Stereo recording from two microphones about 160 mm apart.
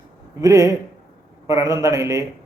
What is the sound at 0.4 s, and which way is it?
A man's voice, 20° right (ahead or behind).